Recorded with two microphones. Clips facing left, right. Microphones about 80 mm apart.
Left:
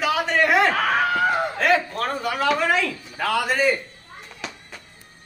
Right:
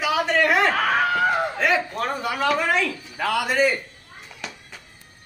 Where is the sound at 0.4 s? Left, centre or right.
Centre.